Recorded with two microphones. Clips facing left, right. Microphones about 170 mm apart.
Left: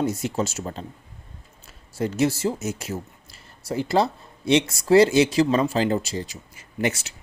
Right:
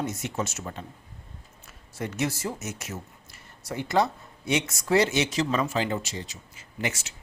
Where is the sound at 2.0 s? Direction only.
30° left (ahead or behind).